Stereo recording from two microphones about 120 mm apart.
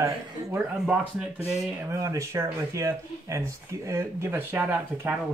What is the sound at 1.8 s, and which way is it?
Speech, 25° right (ahead or behind).